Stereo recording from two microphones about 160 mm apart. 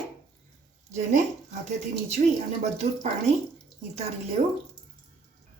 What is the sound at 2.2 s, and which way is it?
Speech, 50° right (ahead or behind).